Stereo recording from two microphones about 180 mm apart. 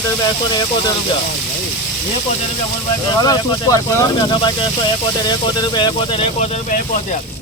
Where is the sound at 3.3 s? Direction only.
20° left (ahead or behind).